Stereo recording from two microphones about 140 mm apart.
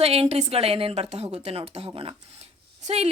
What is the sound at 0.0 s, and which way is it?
Speech, 45° right (ahead or behind).